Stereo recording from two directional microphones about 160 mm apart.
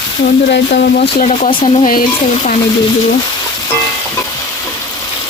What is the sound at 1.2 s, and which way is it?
Speech, 40° left (ahead or behind).